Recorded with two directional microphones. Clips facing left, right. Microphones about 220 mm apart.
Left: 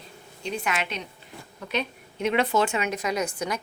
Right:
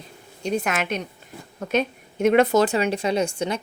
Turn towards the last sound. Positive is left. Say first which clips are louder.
# right 5 dB
turn(degrees=-25)  # may be behind; listen again after turning